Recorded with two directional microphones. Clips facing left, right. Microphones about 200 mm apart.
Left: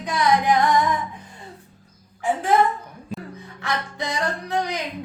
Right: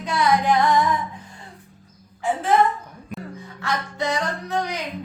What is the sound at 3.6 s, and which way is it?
Music, 15° left (ahead or behind).